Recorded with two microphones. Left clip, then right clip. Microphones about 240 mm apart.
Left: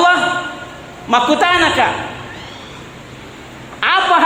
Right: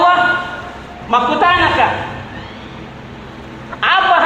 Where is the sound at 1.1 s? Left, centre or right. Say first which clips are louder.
Even; left.